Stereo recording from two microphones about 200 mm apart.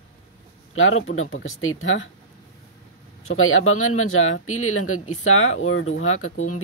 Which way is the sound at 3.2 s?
90° left.